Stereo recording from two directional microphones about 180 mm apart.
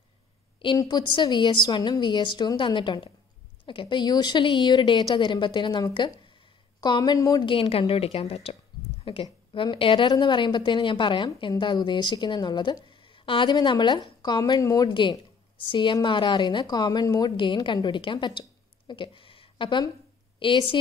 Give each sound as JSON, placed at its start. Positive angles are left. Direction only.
{"t": 0.6, "sound": "a woman's voice", "side_deg": 25}